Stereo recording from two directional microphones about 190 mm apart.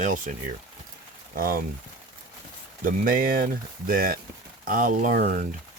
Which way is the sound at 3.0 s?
50° right (ahead or behind).